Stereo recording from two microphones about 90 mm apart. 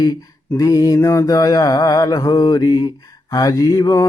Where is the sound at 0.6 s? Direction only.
40° left (ahead or behind).